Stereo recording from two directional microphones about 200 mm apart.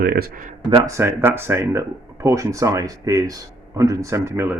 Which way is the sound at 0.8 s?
15° right (ahead or behind).